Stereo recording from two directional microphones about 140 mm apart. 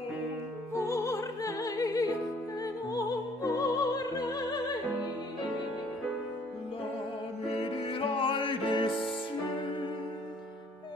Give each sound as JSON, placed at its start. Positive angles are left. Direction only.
{"t": 0.7, "sound": "music", "side_deg": 20}
{"t": 7.4, "sound": "music", "side_deg": 45}